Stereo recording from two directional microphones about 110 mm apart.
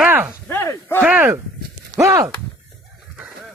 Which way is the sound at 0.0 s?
15° right (ahead or behind).